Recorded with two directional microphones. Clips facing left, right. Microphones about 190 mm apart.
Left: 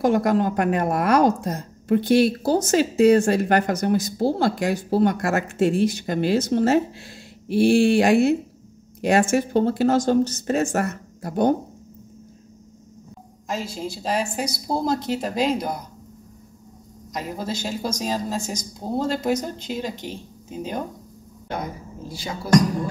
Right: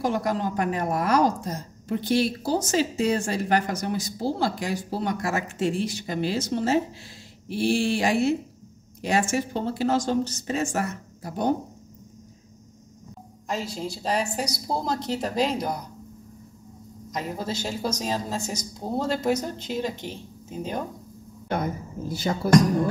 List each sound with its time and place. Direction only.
0.0 s a woman's voice: 55° left (ahead or behind)
13.5 s a woman's voice: centre (ahead or behind)
17.1 s a woman's voice: centre (ahead or behind)
22.0 s speech: 50° right (ahead or behind)